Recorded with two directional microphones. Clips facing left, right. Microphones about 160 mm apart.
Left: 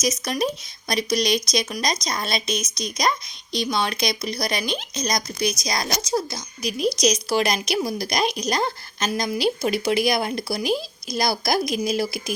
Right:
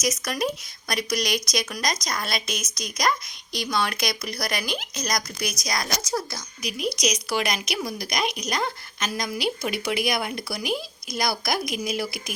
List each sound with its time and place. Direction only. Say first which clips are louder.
0.0 s speech: left 2 dB; 20° left (ahead or behind)
6.6 s a woman's voice: left 5 dB; 35° left (ahead or behind)